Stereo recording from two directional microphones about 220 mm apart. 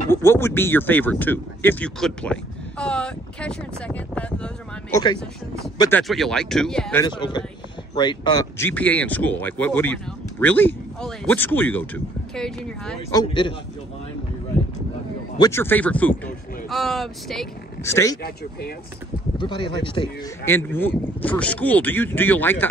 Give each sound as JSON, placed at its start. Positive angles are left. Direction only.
{"t": 0.1, "sound": "speech", "side_deg": 10}
{"t": 4.9, "sound": "speech", "side_deg": 20}
{"t": 5.8, "sound": "speech", "side_deg": 10}
{"t": 7.0, "sound": "speech", "side_deg": 20}
{"t": 13.1, "sound": "speech", "side_deg": 20}
{"t": 15.3, "sound": "speech", "side_deg": 15}
{"t": 17.8, "sound": "speech", "side_deg": 10}
{"t": 19.3, "sound": "speech", "side_deg": 20}
{"t": 20.4, "sound": "speech", "side_deg": 10}